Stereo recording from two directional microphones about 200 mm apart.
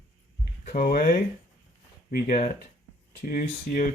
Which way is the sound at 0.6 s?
45° left (ahead or behind).